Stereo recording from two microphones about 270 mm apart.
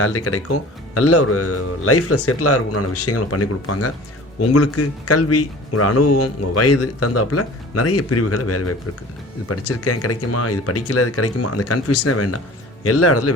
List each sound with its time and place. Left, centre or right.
0.0 s speech: left